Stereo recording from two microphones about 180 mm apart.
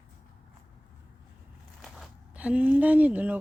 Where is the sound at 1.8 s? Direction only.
5° right (ahead or behind).